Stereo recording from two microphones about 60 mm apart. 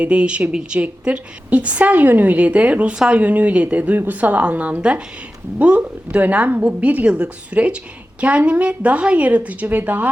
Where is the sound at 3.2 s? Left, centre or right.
Right.